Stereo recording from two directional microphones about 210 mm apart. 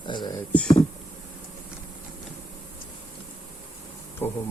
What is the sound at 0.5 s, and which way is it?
Speech, 5° left (ahead or behind).